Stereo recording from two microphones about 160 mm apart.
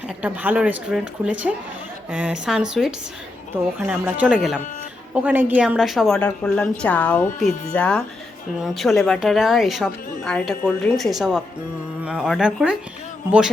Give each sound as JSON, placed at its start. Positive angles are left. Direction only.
{"t": 0.2, "sound": "a woman's voice", "side_deg": -10}